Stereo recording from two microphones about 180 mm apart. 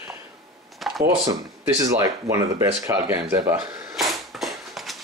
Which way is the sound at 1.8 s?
15° right (ahead or behind).